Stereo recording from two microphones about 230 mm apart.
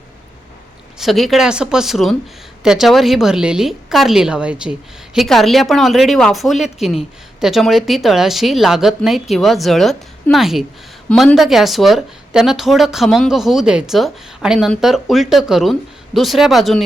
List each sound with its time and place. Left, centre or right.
0.9 s speech: centre